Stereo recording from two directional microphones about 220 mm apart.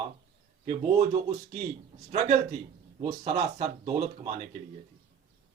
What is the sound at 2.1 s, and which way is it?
Speech, 30° right (ahead or behind).